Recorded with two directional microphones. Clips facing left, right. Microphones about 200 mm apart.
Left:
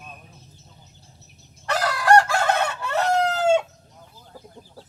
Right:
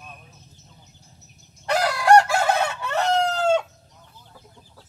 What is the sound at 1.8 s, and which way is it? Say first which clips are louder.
Chicken: right 1 dB; 15° right (ahead or behind).